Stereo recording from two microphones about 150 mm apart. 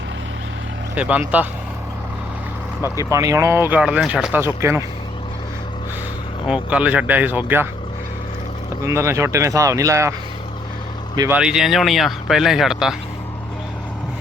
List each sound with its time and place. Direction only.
0.9 s speech: 10° right (ahead or behind)
2.8 s speech: 20° right (ahead or behind)
6.4 s speech: 5° right (ahead or behind)
8.8 s speech: 20° right (ahead or behind)
11.3 s speech: 5° right (ahead or behind)